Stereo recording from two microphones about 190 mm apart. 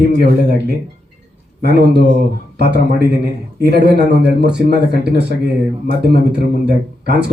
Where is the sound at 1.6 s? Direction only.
60° right (ahead or behind).